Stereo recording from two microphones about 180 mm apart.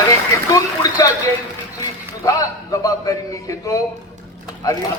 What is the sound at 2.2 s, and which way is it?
A man's voice, 20° left (ahead or behind).